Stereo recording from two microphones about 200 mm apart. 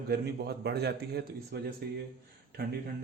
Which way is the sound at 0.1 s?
55° right (ahead or behind).